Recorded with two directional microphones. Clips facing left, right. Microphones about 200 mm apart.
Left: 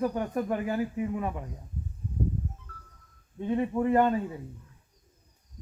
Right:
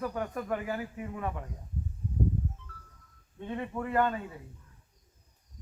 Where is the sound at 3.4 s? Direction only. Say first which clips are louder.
Left 8 dB; 20° left (ahead or behind).